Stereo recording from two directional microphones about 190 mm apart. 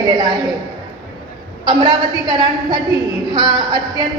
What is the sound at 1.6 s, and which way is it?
A woman's voice, 20° right (ahead or behind).